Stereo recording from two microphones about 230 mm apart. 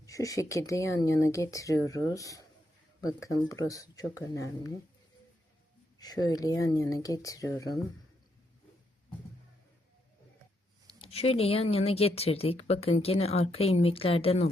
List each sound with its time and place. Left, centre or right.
0.0 s speech: centre
6.0 s speech: centre
11.0 s speech: left